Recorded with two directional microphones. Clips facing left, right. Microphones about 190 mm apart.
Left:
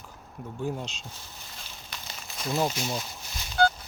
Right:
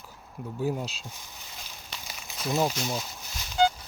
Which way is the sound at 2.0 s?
10° right (ahead or behind).